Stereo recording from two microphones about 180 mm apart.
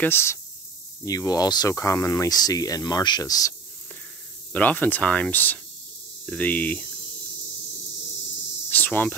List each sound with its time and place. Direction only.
0.0 s cricket: 15° left (ahead or behind)
1.0 s speech: 20° left (ahead or behind)
4.5 s cricket: 10° left (ahead or behind)
8.6 s cricket: 10° left (ahead or behind)